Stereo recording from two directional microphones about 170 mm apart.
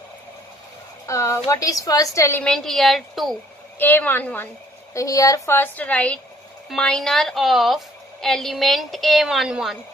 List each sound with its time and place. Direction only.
1.0 s a woman's voice: 15° left (ahead or behind)
2.4 s a woman's voice: 5° left (ahead or behind)
3.8 s a woman's voice: 10° left (ahead or behind)